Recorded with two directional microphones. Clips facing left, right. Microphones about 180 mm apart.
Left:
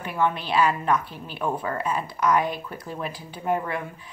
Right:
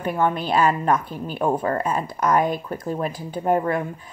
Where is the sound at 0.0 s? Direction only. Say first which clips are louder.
Right 3 dB; 45° right (ahead or behind).